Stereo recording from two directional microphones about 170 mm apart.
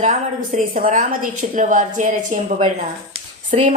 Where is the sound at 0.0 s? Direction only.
50° right (ahead or behind).